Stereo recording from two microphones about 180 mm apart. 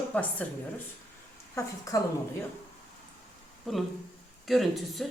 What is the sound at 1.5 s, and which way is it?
Speech, 20° left (ahead or behind).